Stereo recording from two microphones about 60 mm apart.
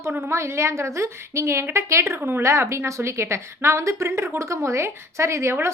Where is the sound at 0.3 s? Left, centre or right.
Right.